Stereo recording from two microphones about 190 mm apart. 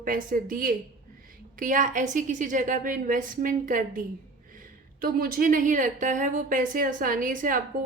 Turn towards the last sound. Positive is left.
turn(degrees=-45)  # may be behind; listen again after turning